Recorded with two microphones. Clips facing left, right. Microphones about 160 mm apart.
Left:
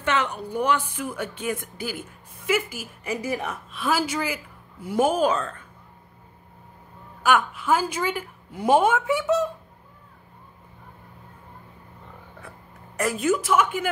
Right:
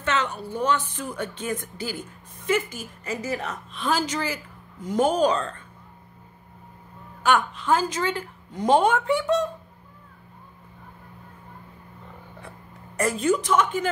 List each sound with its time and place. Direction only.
0.0 s a woman's voice: 15° left (ahead or behind)
7.2 s a woman's voice: 5° left (ahead or behind)
12.4 s a sound: centre (ahead or behind)